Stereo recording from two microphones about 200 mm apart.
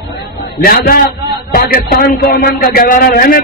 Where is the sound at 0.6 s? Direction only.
50° left (ahead or behind).